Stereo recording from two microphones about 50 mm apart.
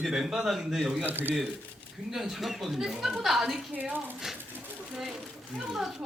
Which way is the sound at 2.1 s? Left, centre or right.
Centre.